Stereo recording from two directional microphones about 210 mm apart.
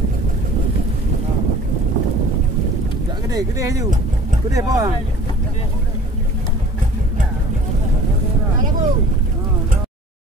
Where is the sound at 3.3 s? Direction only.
15° right (ahead or behind).